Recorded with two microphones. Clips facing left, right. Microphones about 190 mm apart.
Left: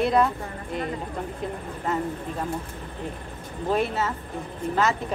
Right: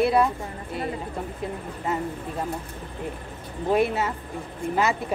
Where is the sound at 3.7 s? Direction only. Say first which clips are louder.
Right 3 dB; 10° right (ahead or behind).